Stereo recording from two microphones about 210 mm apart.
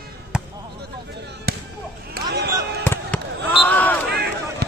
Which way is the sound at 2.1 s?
50° right (ahead or behind).